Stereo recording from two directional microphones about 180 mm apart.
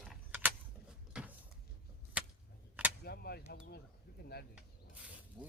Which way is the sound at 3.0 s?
60° left (ahead or behind).